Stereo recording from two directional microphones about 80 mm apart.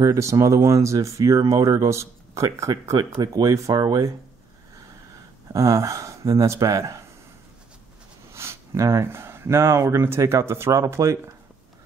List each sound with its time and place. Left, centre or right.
0.0 s speech: right
3.7 s speech: right
5.5 s speech: right
8.3 s speech: right